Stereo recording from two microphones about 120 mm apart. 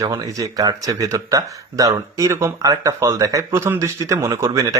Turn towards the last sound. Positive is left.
turn(degrees=-25)  # may be behind; listen again after turning